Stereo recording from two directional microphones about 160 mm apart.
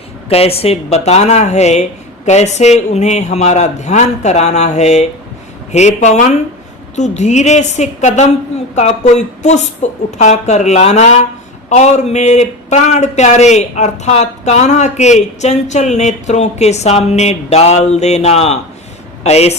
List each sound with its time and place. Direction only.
0.3 s speech: 40° left (ahead or behind)